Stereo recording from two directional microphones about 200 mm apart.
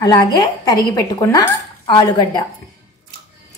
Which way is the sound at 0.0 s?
20° left (ahead or behind).